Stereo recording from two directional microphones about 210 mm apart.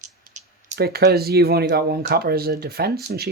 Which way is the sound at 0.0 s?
35° right (ahead or behind).